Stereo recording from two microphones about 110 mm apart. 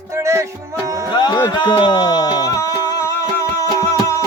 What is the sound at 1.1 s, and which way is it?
Music, 40° left (ahead or behind).